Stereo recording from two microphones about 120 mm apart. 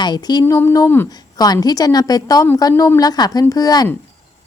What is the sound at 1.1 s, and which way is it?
A woman's voice, 35° left (ahead or behind).